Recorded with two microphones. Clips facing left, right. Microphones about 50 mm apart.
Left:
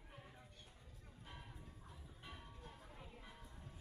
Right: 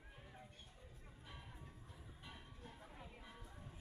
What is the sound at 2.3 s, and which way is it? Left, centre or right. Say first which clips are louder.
Music: left 1 dB; centre.